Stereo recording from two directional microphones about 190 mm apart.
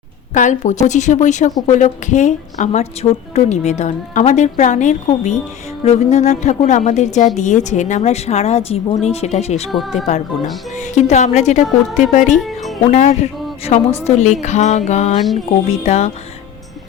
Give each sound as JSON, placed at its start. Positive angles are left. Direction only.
{"t": 0.3, "sound": "a woman's voice", "side_deg": 40}
{"t": 9.7, "sound": "speech", "side_deg": 0}
{"t": 10.8, "sound": "a woman's voice", "side_deg": 40}
{"t": 12.4, "sound": "music", "side_deg": 0}
{"t": 12.9, "sound": "a woman's voice", "side_deg": 40}